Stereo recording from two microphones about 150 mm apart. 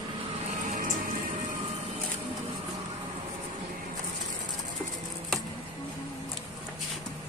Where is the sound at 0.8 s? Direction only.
70° right (ahead or behind).